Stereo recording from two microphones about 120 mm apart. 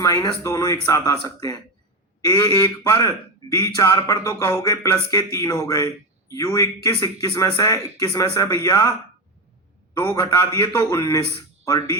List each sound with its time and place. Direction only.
0.0 s a man's voice: 30° left (ahead or behind)
2.2 s a man's voice: 35° left (ahead or behind)
10.2 s a man's voice: 25° left (ahead or behind)